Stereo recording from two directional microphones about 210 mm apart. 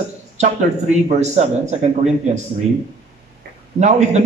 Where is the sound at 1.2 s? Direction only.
30° right (ahead or behind).